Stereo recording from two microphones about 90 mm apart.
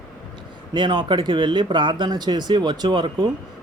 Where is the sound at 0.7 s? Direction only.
60° right (ahead or behind).